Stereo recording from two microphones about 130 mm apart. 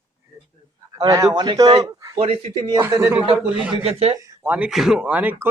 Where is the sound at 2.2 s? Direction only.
45° right (ahead or behind).